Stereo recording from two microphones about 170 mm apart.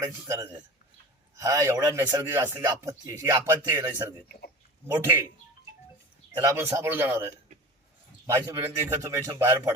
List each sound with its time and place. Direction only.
0.0 s a man's voice: 20° right (ahead or behind)
4.3 s speech: 65° left (ahead or behind)
4.9 s a man's voice: 15° right (ahead or behind)
6.4 s a man's voice: 15° right (ahead or behind)